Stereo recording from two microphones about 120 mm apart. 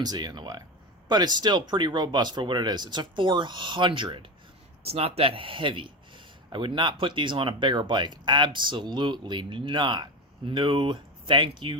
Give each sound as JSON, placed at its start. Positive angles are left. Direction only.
{"t": 0.0, "sound": "speech", "side_deg": -35}
{"t": 4.9, "sound": "speech", "side_deg": -55}